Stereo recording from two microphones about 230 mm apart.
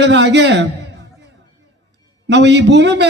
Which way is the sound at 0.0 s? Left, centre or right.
Right.